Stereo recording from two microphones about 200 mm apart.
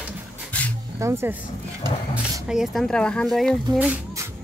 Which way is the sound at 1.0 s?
15° right (ahead or behind).